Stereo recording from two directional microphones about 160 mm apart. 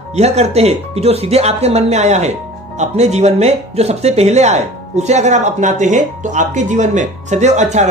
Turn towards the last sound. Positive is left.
turn(degrees=-45)  # may be behind; listen again after turning